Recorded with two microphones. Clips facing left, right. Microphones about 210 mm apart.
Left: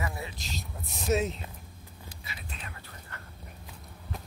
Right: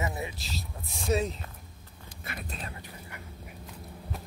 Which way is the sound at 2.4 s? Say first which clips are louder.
Right 3 dB; 40° right (ahead or behind).